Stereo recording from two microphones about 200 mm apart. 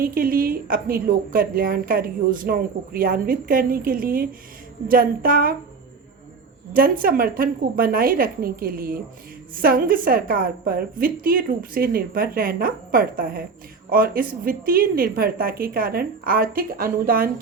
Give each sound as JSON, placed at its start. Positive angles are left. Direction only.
{"t": 0.0, "sound": "a woman's voice", "side_deg": -45}
{"t": 6.7, "sound": "a woman's voice", "side_deg": -45}